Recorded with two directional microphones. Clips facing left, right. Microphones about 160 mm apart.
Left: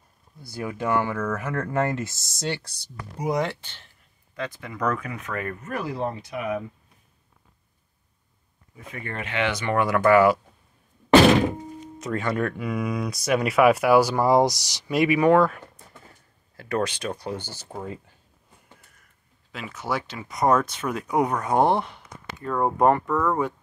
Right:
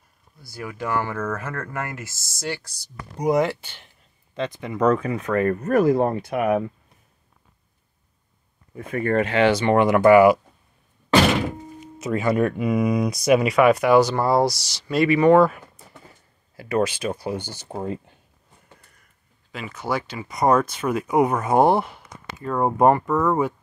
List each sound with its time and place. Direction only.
0.6 s speech: 25° left (ahead or behind)
3.2 s speech: centre (ahead or behind)
4.4 s speech: 20° right (ahead or behind); by 6.6 s 60° right (ahead or behind)
8.7 s speech: 55° right (ahead or behind); by 10.4 s 15° right (ahead or behind)
11.8 s speech: 10° right (ahead or behind)
13.4 s speech: 5° left (ahead or behind)
15.3 s speech: 5° right (ahead or behind)
17.7 s speech: 25° right (ahead or behind)
19.5 s speech: centre (ahead or behind)